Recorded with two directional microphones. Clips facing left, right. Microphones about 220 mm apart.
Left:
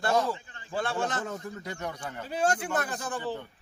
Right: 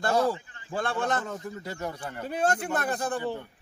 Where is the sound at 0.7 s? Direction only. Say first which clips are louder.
Right 2 dB; 50° right (ahead or behind).